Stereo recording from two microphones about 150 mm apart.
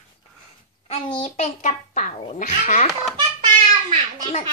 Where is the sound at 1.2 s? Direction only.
55° left (ahead or behind).